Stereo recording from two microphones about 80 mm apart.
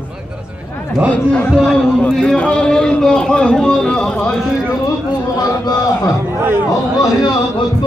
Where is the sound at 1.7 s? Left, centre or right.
Centre.